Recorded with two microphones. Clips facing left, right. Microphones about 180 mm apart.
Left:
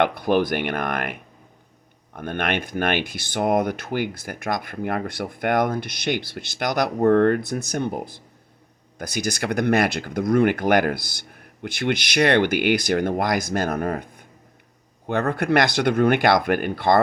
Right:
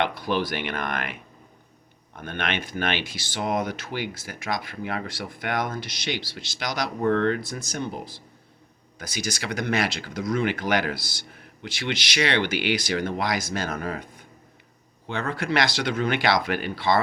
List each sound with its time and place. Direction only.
0.0 s speech: 55° left (ahead or behind)